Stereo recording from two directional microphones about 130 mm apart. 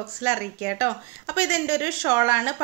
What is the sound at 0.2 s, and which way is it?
A woman's voice, 15° right (ahead or behind).